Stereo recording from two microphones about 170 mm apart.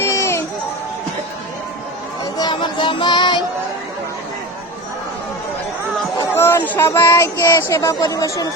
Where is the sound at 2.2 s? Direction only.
25° left (ahead or behind).